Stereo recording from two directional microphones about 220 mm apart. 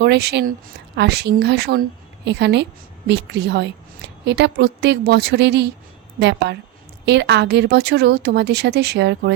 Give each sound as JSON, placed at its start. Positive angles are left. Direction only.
{"t": 0.0, "sound": "speech", "side_deg": -50}